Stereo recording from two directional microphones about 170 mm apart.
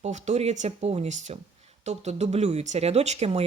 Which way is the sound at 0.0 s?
40° right (ahead or behind).